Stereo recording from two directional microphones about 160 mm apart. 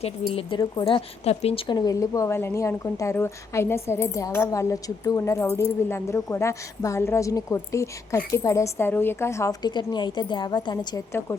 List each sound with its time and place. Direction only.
0.3 s a woman's voice: 30° left (ahead or behind)
1.6 s speech: 25° left (ahead or behind)